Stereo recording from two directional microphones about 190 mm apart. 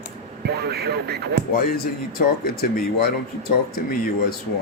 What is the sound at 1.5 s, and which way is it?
Speech, 50° left (ahead or behind).